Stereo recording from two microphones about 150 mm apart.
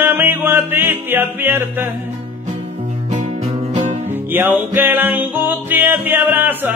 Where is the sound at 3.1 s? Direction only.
50° right (ahead or behind).